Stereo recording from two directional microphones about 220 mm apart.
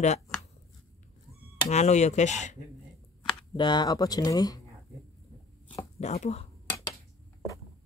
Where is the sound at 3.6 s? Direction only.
20° left (ahead or behind).